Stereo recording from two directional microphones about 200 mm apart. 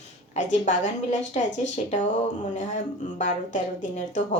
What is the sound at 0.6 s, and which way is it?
A woman's voice, 35° left (ahead or behind).